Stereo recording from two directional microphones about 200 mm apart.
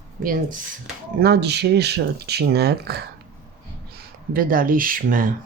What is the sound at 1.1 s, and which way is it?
Speech, 55° right (ahead or behind).